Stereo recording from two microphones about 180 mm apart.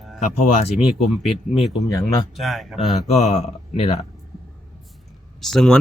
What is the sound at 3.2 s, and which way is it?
Speech, 40° left (ahead or behind).